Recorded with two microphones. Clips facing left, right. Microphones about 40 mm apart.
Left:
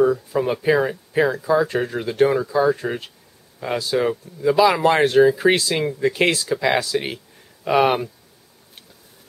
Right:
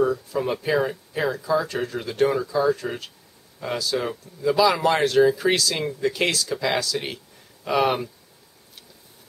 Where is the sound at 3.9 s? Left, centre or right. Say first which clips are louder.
Left 8 dB; centre.